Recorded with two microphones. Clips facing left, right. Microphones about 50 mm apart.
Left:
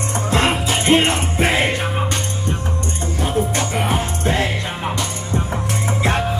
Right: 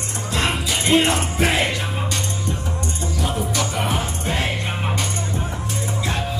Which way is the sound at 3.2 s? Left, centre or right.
Left.